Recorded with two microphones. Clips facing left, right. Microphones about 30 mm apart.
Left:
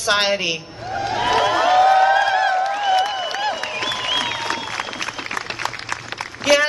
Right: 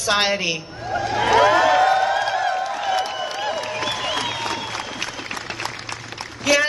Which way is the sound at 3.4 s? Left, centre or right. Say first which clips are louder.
Left 1 dB; left.